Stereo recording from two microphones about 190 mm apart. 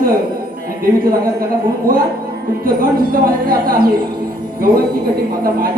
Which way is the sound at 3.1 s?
50° right (ahead or behind).